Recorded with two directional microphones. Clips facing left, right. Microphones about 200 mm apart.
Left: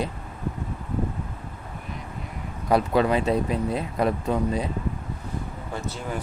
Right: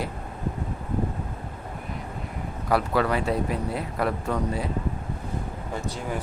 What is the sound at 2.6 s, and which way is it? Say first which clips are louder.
Speech: left 3 dB; 20° left (ahead or behind).